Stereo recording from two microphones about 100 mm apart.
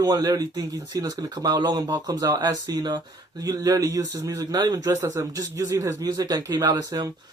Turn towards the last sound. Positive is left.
turn(degrees=-40)  # may be behind; listen again after turning